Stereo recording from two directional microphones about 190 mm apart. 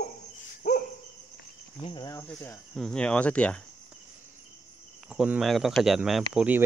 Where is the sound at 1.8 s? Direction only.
25° left (ahead or behind).